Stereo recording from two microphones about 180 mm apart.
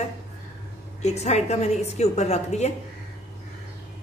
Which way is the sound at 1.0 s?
40° left (ahead or behind).